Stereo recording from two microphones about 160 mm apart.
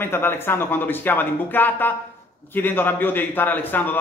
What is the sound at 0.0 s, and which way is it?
A man's voice, 15° left (ahead or behind).